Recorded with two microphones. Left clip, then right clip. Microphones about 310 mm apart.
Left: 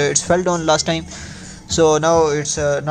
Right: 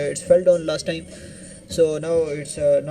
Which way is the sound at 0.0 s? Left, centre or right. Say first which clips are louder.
Even; left.